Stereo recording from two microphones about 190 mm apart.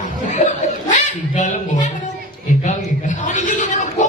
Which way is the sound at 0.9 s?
40° left (ahead or behind).